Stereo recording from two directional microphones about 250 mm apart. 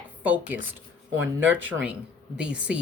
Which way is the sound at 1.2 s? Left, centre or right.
Right.